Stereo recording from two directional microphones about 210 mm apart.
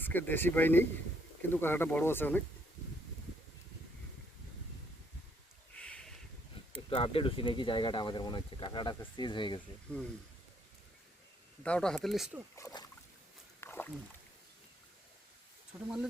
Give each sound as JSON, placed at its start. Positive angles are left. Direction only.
{"t": 0.0, "sound": "speech", "side_deg": 10}
{"t": 5.7, "sound": "a sound", "side_deg": 5}
{"t": 6.9, "sound": "speech", "side_deg": 25}
{"t": 11.6, "sound": "speech", "side_deg": 5}
{"t": 12.5, "sound": "speech", "side_deg": 15}
{"t": 13.6, "sound": "rowboat", "side_deg": 10}
{"t": 15.7, "sound": "speech", "side_deg": -10}